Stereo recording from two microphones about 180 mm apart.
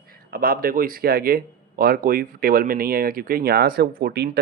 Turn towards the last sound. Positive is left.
turn(degrees=-65)  # may be behind; listen again after turning